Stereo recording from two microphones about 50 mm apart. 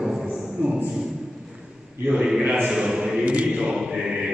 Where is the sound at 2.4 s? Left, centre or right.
Right.